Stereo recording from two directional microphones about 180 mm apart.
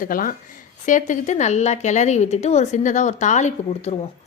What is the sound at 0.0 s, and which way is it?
A woman's voice, 50° left (ahead or behind).